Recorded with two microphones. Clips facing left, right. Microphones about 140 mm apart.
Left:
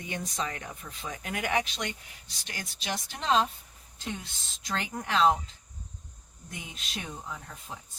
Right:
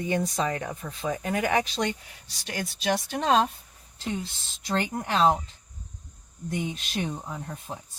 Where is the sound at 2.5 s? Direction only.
55° right (ahead or behind).